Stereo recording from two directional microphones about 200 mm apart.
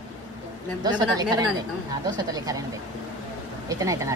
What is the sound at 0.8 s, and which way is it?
Speech, 20° right (ahead or behind).